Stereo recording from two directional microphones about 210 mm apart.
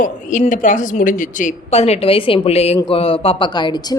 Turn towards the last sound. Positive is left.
turn(degrees=20)  # may be behind; listen again after turning